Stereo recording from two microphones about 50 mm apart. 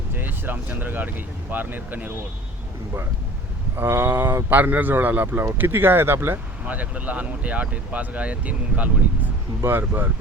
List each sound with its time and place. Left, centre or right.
0.2 s speech: right
3.8 s speech: right
6.7 s speech: right
9.6 s speech: right